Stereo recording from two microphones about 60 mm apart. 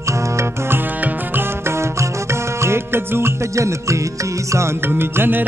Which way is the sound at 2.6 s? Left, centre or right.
Right.